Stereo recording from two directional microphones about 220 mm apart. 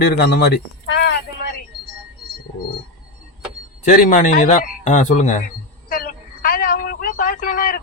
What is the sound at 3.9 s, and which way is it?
Speech, 35° left (ahead or behind).